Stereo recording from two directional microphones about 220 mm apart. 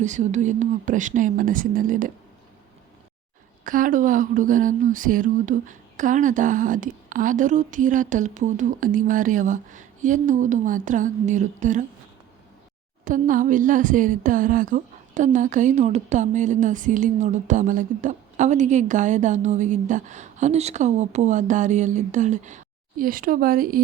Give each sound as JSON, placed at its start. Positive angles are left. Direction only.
{"t": 0.0, "sound": "a woman's voice", "side_deg": -35}
{"t": 3.6, "sound": "a woman's voice", "side_deg": -40}
{"t": 13.1, "sound": "a woman's voice", "side_deg": -35}